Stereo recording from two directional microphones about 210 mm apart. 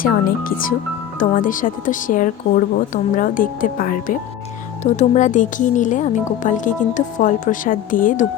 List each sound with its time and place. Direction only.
0.0 s speech: 40° left (ahead or behind)